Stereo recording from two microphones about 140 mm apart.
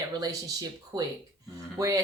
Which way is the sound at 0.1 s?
25° right (ahead or behind).